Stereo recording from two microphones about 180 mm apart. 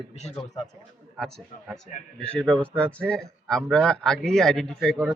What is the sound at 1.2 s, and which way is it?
A man's voice, centre (ahead or behind).